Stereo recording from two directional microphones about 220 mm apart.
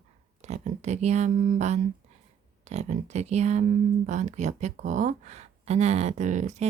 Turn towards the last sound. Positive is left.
turn(degrees=-30)  # may be behind; listen again after turning